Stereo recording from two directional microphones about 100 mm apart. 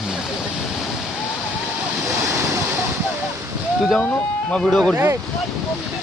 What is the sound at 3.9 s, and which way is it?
Speech, 10° left (ahead or behind).